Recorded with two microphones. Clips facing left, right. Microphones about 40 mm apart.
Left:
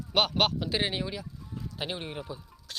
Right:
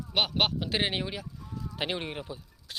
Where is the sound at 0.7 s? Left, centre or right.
Right.